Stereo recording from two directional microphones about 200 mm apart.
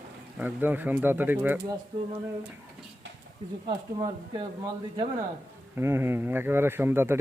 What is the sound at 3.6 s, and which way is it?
Speech, 25° right (ahead or behind).